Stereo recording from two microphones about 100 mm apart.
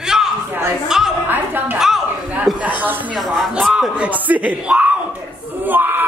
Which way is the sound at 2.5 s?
15° right (ahead or behind).